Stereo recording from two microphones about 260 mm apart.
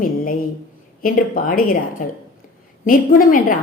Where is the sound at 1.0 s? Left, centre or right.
Left.